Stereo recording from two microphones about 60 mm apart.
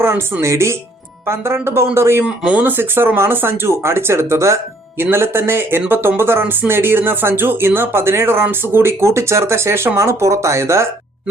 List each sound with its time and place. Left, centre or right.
0.0 s speech: right
2.2 s speech: centre
2.6 s speech: right